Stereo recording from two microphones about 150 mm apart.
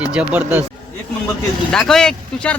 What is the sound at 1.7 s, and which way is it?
Speech, 5° left (ahead or behind).